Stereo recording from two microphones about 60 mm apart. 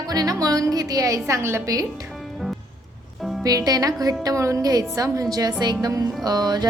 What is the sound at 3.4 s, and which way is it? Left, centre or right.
Speech, right.